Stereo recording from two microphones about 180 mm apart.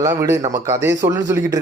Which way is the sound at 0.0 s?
20° right (ahead or behind).